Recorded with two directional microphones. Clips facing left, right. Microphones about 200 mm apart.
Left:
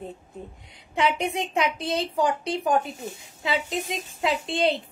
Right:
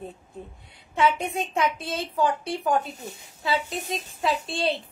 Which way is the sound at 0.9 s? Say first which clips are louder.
Right 1 dB; 15° left (ahead or behind).